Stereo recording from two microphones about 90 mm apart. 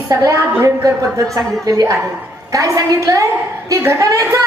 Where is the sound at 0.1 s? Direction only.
35° right (ahead or behind).